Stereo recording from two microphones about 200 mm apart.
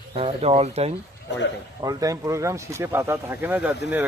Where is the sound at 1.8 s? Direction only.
20° right (ahead or behind).